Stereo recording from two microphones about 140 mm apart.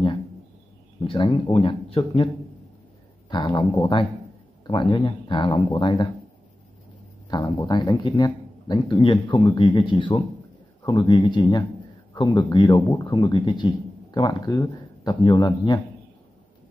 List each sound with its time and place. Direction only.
1.0 s speech: 40° left (ahead or behind)
3.3 s speech: 30° left (ahead or behind)
7.2 s speech: 30° left (ahead or behind)